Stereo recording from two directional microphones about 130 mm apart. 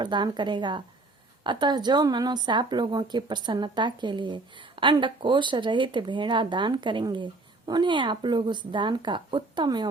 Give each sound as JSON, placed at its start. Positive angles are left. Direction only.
{"t": 0.0, "sound": "speech", "side_deg": -35}